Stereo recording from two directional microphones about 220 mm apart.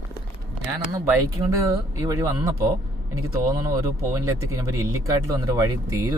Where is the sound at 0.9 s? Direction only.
15° right (ahead or behind).